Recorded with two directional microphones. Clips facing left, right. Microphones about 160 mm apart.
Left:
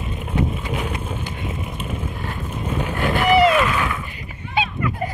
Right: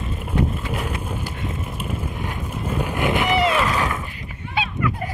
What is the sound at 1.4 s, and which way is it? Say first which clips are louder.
Vehicle: even; centre (ahead or behind).